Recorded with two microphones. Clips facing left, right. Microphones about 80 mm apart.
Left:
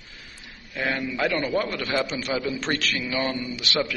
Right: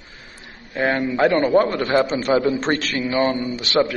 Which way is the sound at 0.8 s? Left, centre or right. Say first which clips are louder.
Right 8 dB; right.